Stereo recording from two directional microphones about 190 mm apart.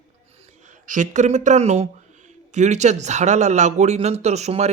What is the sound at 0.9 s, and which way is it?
Speech, 40° right (ahead or behind).